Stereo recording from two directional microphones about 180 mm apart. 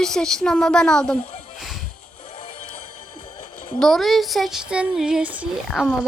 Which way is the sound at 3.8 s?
Centre (ahead or behind).